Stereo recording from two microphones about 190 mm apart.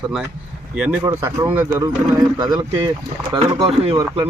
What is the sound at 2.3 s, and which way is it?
Speech, 25° right (ahead or behind).